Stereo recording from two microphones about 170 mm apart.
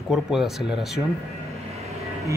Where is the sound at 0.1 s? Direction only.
Centre (ahead or behind).